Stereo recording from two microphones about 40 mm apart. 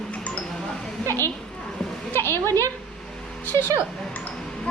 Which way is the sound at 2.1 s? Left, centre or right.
Left.